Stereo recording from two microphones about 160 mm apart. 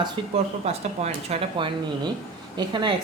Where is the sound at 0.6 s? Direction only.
40° right (ahead or behind).